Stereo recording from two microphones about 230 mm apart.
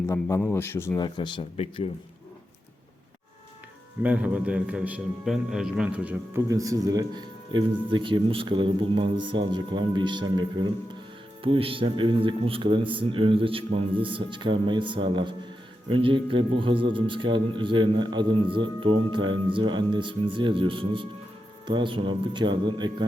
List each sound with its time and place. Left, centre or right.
0.1 s a man's voice: centre
4.0 s a man's voice: centre